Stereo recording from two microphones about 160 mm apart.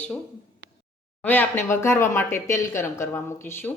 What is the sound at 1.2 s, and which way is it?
Speech, 10° left (ahead or behind).